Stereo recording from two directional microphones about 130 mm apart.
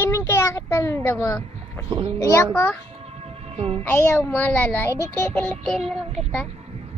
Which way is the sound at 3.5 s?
50° right (ahead or behind).